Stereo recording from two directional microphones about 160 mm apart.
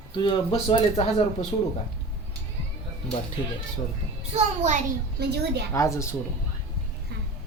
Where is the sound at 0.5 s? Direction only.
40° left (ahead or behind).